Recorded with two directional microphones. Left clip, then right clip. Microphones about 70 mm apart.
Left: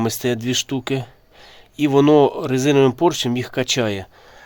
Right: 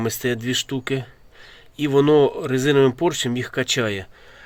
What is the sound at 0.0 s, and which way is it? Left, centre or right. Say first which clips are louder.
Speech: left 2 dB; left.